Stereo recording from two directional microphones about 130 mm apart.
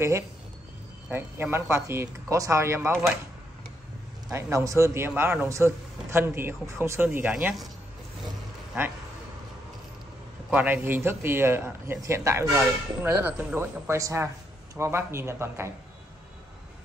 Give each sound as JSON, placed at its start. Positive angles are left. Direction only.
{"t": 1.1, "sound": "speech", "side_deg": -20}
{"t": 4.3, "sound": "speech", "side_deg": -20}
{"t": 10.5, "sound": "speech", "side_deg": -15}